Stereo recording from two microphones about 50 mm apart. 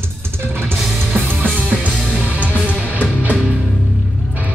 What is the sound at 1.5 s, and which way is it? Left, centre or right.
Music, right.